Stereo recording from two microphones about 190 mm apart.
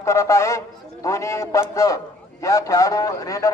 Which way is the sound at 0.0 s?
15° left (ahead or behind).